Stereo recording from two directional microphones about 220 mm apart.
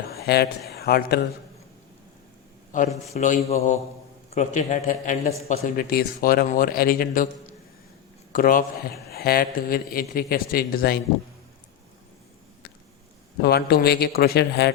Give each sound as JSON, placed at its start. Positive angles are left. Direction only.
{"t": 0.1, "sound": "a sound", "side_deg": 45}
{"t": 0.7, "sound": "a man's voice", "side_deg": 45}
{"t": 3.1, "sound": "a man's voice", "side_deg": 35}
{"t": 13.4, "sound": "a man's voice", "side_deg": 45}